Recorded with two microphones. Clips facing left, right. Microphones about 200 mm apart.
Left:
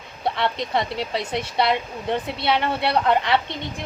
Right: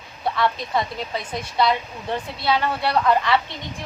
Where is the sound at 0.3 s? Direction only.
25° left (ahead or behind).